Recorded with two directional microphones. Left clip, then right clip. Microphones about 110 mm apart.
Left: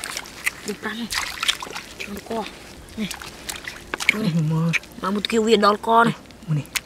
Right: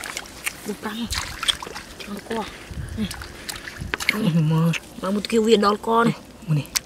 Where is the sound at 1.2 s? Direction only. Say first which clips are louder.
Right 1 dB; 20° left (ahead or behind).